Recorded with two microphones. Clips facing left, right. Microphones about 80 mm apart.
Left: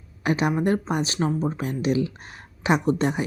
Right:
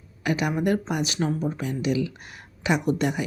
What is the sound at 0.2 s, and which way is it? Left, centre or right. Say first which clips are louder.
Speech: left 2 dB; left.